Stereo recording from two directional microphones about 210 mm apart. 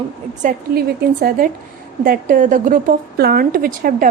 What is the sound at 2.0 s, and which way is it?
A woman's voice, 40° right (ahead or behind).